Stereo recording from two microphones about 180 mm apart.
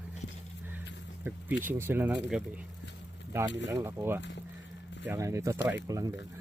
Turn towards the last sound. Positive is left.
turn(degrees=-20)  # may be behind; listen again after turning